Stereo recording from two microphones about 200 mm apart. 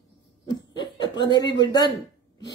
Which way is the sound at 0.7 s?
20° left (ahead or behind).